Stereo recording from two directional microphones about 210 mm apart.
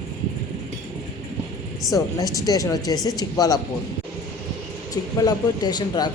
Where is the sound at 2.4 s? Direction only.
15° left (ahead or behind).